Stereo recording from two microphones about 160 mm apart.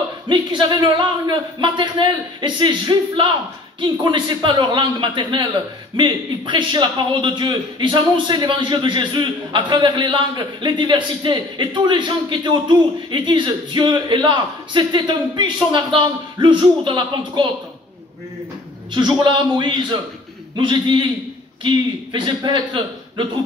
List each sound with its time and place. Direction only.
0.3 s a man's voice: 30° right (ahead or behind)
18.9 s a man's voice: 30° right (ahead or behind)